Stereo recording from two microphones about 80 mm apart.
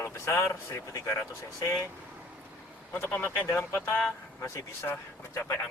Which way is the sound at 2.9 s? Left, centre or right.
Left.